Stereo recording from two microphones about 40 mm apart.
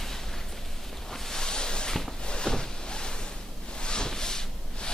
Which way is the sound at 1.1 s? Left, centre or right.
Centre.